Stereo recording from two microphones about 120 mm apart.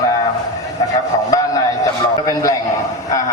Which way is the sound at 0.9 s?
30° left (ahead or behind).